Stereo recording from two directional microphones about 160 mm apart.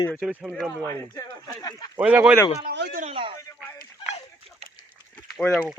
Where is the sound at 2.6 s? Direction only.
90° right.